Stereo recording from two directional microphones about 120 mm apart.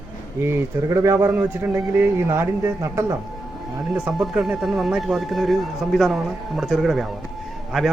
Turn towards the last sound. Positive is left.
turn(degrees=0)  # may be behind; listen again after turning